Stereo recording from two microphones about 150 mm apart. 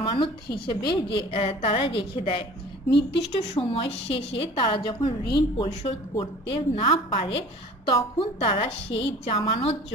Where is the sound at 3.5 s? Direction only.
40° left (ahead or behind).